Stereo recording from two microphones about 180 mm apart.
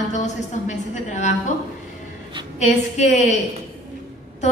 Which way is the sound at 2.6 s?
40° left (ahead or behind).